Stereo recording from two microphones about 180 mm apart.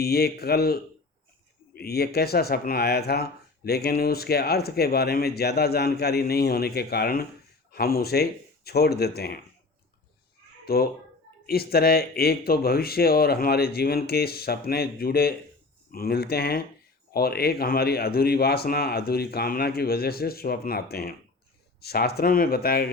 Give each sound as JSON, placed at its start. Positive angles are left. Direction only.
{"t": 0.0, "sound": "speech", "side_deg": 60}
{"t": 10.7, "sound": "speech", "side_deg": 60}